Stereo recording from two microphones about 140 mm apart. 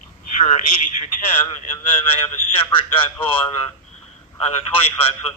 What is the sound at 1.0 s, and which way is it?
Speech, 60° left (ahead or behind).